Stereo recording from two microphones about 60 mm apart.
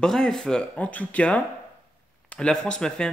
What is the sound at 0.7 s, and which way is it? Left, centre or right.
Speech, left.